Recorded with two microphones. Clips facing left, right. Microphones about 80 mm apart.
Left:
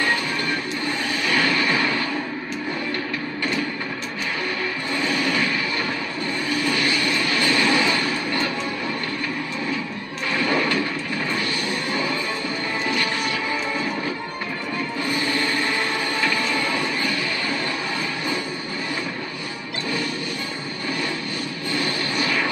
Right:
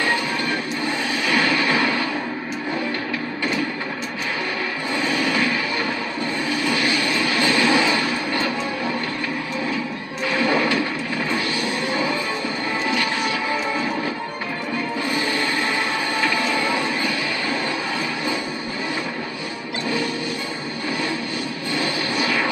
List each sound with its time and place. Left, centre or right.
1.3 s a sound: centre
1.7 s music: centre
6.7 s vehicle: centre
7.9 s a sound: centre
10.3 s music: centre
16.5 s music: centre
21.7 s vehicle: centre